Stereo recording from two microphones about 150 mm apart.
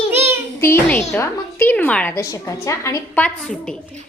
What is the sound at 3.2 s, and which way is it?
Speech, 5° left (ahead or behind).